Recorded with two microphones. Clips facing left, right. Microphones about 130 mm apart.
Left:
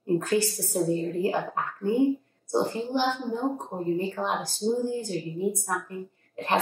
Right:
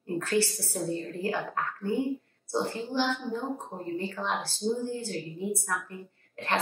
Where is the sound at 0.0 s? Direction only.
15° left (ahead or behind).